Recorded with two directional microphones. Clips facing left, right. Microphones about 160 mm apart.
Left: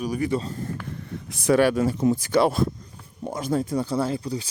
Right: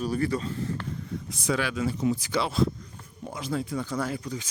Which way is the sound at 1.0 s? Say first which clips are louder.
Left 8 dB; 60° left (ahead or behind).